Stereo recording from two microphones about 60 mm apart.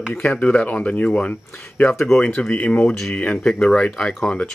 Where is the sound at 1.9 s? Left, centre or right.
Centre.